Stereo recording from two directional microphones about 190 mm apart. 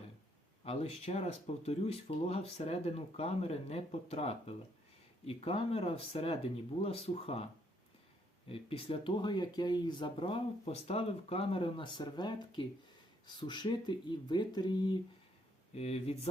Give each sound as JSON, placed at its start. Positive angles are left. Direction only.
{"t": 0.6, "sound": "speech", "side_deg": 30}
{"t": 8.4, "sound": "speech", "side_deg": 30}